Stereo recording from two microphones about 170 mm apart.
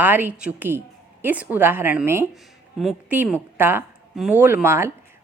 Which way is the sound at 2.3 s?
Centre (ahead or behind).